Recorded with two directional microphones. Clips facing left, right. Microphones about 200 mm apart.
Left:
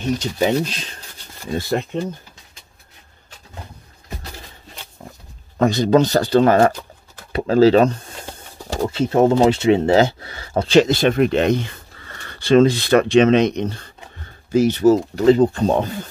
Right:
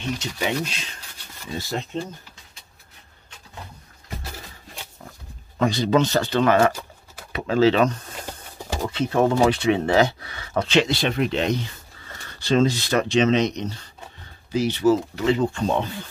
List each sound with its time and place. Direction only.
0.0 s speech: 40° left (ahead or behind)
1.4 s speech: 55° left (ahead or behind)
5.6 s speech: 45° left (ahead or behind)
8.9 s speech: 30° left (ahead or behind)